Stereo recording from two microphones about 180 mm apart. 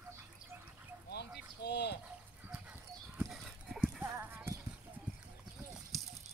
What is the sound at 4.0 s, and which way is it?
Clip-clop, 10° right (ahead or behind).